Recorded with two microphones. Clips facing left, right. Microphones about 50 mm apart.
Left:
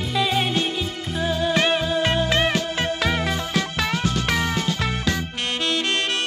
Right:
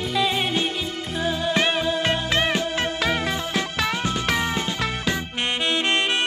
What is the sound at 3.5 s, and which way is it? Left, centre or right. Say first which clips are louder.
Music: left 1 dB; right.